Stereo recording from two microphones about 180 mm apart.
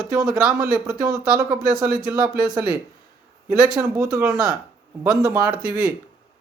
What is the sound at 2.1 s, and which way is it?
Speech, 55° right (ahead or behind).